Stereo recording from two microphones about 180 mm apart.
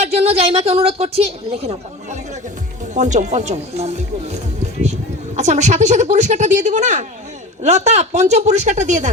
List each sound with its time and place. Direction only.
0.0 s speech: 35° right (ahead or behind)